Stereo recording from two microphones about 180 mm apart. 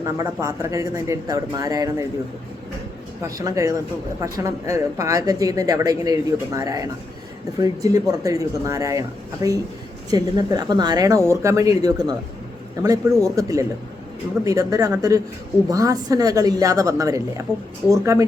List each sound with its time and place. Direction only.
0.0 s speech: 20° right (ahead or behind)
3.2 s speech: 20° right (ahead or behind)